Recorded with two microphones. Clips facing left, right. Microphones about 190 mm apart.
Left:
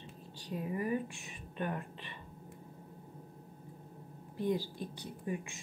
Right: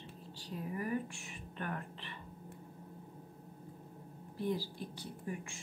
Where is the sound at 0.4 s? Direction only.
20° left (ahead or behind).